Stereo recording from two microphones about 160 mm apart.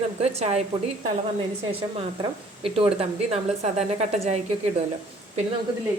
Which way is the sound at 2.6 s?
35° right (ahead or behind).